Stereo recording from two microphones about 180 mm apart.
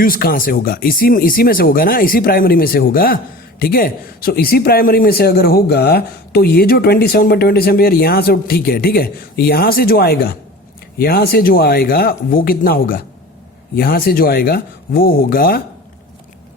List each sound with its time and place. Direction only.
0.0 s a man's voice: 55° left (ahead or behind)